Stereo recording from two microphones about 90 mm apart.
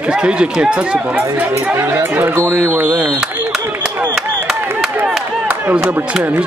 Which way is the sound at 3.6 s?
25° right (ahead or behind).